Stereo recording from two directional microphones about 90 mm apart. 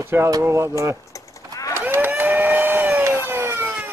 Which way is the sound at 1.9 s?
20° right (ahead or behind).